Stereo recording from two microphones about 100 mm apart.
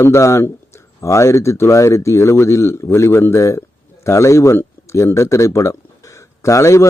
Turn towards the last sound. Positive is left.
turn(degrees=30)  # may be behind; listen again after turning